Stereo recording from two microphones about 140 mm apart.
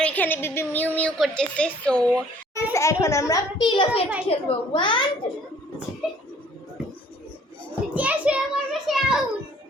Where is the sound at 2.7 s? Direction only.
20° left (ahead or behind).